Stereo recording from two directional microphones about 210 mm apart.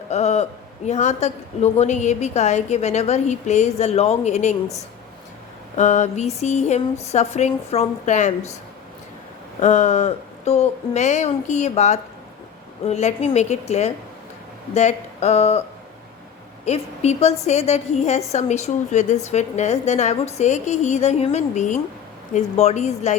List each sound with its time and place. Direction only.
0.1 s a man's voice: 30° left (ahead or behind)
5.7 s a woman's voice: 35° left (ahead or behind)
9.6 s a woman's voice: 35° left (ahead or behind)
16.6 s a woman's voice: 30° left (ahead or behind)